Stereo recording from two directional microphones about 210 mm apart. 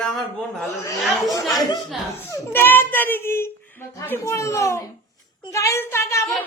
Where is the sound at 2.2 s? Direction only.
10° left (ahead or behind).